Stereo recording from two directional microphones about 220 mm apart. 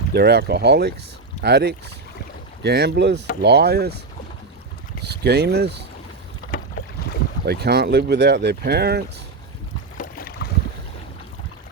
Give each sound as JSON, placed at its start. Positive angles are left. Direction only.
{"t": 0.1, "sound": "speech", "side_deg": -45}
{"t": 5.0, "sound": "speech", "side_deg": -50}
{"t": 6.5, "sound": "boat", "side_deg": 40}
{"t": 7.4, "sound": "speech", "side_deg": -50}
{"t": 10.0, "sound": "boat", "side_deg": 40}